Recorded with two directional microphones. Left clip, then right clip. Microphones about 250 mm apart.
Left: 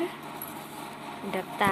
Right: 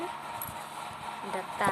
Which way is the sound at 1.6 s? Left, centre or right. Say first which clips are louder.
Left 3 dB; centre.